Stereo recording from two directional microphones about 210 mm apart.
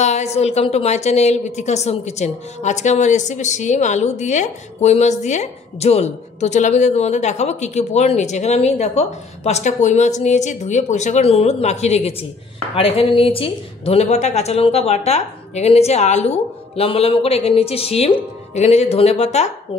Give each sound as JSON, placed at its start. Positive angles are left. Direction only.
{"t": 0.0, "sound": "a woman's voice", "side_deg": 30}